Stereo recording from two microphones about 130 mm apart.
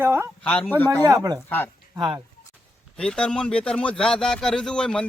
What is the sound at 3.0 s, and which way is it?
Speech, 5° left (ahead or behind).